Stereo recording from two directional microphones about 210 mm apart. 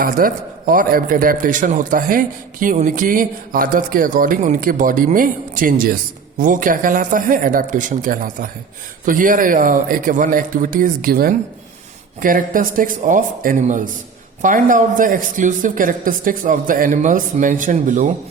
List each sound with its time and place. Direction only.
0.0 s a man's voice: 40° right (ahead or behind)